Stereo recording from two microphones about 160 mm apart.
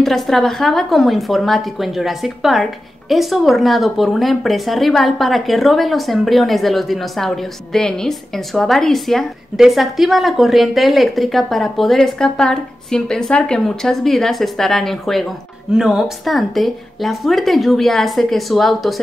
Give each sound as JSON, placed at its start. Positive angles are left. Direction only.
{"t": 0.0, "sound": "speech", "side_deg": 0}